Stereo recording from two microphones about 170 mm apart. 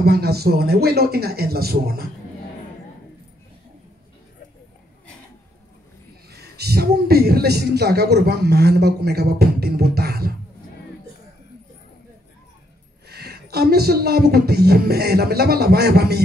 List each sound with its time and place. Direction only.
0.0 s speech: 70° right (ahead or behind)
6.3 s speech: 70° right (ahead or behind)
13.1 s speech: 65° right (ahead or behind)